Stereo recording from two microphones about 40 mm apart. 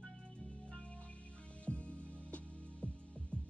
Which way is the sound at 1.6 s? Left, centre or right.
Left.